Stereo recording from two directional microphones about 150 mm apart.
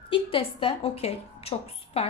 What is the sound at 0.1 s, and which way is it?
A woman's voice, 35° left (ahead or behind).